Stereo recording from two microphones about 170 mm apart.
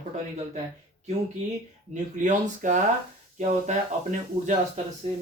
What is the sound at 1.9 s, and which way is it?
Speech, 45° right (ahead or behind).